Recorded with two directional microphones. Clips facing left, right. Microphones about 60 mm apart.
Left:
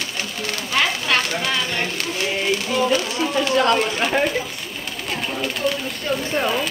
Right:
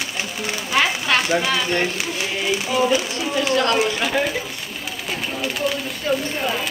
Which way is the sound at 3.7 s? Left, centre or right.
Centre.